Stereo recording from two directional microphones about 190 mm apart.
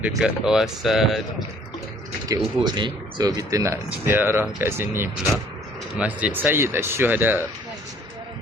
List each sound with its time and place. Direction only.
0.2 s speech: 5° right (ahead or behind)
2.3 s speech: 20° right (ahead or behind)